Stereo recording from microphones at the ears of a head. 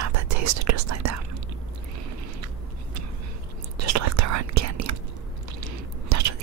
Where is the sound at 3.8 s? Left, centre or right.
Right.